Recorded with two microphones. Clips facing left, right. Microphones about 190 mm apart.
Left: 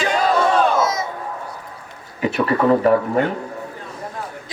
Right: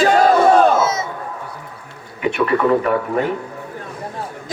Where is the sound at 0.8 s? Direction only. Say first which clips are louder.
Right 1 dB; 25° right (ahead or behind).